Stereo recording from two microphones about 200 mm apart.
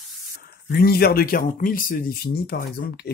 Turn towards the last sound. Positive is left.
turn(degrees=50)  # may be behind; listen again after turning